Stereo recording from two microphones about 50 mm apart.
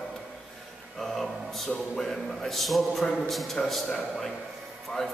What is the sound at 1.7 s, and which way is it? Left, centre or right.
A man's voice, centre.